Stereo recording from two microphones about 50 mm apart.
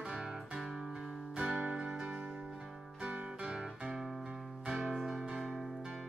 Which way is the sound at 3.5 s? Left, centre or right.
Centre.